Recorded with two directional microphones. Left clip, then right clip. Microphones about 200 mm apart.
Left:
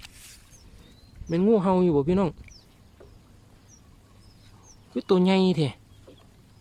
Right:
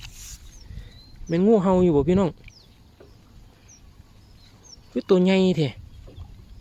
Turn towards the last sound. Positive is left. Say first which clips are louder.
# right 2 dB
turn(degrees=-5)  # may be behind; listen again after turning